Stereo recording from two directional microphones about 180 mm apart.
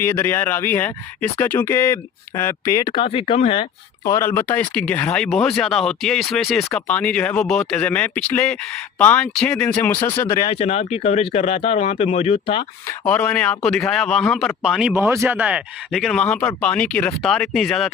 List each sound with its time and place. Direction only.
0.0 s speech: 10° left (ahead or behind); by 3.7 s 30° left (ahead or behind)
4.0 s speech: 15° left (ahead or behind); by 12.6 s 30° left (ahead or behind)
13.1 s speech: 5° left (ahead or behind)